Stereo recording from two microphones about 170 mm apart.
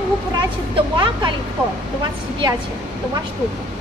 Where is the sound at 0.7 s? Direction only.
25° right (ahead or behind).